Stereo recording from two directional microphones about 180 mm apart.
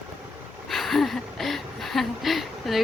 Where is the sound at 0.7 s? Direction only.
Centre (ahead or behind).